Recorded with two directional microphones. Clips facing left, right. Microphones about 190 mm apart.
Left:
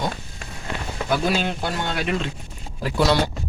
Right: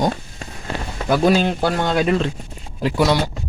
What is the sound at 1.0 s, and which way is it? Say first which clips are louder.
Speech: right 7 dB; 45° right (ahead or behind).